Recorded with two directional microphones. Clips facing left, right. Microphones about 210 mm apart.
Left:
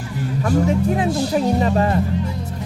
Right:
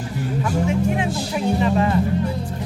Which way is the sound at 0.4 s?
40° left (ahead or behind).